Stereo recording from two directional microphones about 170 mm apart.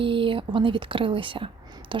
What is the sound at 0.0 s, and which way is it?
A woman's voice, 30° right (ahead or behind).